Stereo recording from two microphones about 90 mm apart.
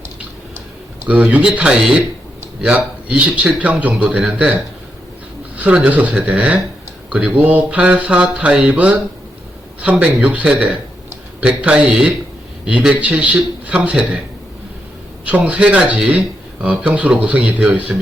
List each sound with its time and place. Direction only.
1.0 s a man's voice: 15° right (ahead or behind)
5.5 s a man's voice: 15° right (ahead or behind)
15.3 s a man's voice: 15° right (ahead or behind)